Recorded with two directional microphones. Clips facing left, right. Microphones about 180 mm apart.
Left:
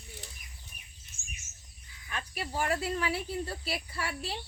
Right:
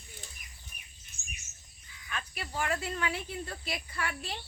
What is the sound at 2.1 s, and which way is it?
Cricket, 35° left (ahead or behind).